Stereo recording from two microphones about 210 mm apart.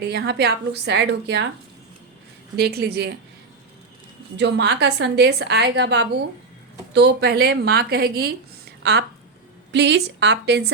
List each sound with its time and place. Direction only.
0.0 s a woman's voice: 50° right (ahead or behind)
2.6 s a woman's voice: 50° right (ahead or behind)
4.4 s a woman's voice: 55° right (ahead or behind)